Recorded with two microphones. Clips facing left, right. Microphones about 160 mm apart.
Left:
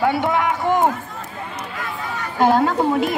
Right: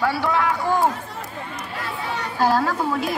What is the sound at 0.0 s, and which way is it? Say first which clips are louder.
Run: left 3 dB; 20° left (ahead or behind).